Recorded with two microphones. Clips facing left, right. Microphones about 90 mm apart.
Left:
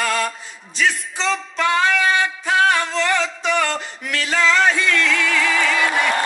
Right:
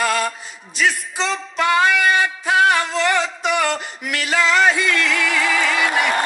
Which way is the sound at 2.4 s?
15° right (ahead or behind).